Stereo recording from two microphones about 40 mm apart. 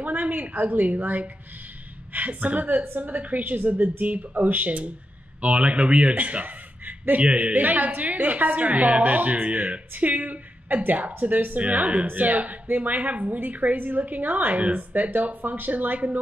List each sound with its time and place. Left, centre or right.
0.0 s a woman's voice: right